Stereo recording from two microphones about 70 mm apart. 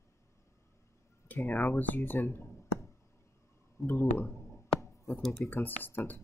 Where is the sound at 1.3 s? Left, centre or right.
Left.